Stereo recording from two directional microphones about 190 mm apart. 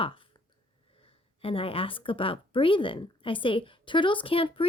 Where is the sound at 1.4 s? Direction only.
30° left (ahead or behind).